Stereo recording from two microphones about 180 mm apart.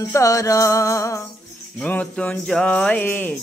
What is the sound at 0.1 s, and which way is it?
Music, 20° left (ahead or behind).